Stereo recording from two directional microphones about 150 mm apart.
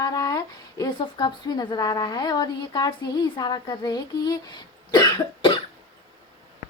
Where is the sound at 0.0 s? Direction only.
25° left (ahead or behind).